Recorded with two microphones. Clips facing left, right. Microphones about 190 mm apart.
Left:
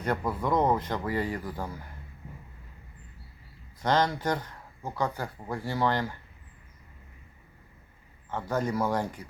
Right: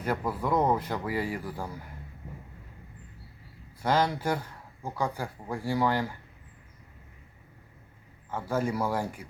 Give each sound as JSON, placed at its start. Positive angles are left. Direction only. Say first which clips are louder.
{"t": 0.0, "sound": "speech", "louder": "left 1 dB", "side_deg": -5}
{"t": 3.8, "sound": "speech", "louder": "even", "side_deg": -10}
{"t": 8.3, "sound": "speech", "louder": "even", "side_deg": -10}